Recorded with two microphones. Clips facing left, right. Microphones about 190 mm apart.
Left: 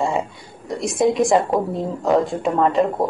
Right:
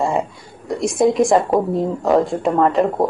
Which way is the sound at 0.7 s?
Centre (ahead or behind).